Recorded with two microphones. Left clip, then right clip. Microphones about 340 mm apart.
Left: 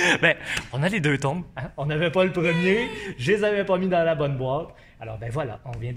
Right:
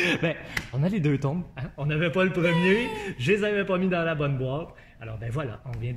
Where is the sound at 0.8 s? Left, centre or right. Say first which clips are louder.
Left 5 dB; left.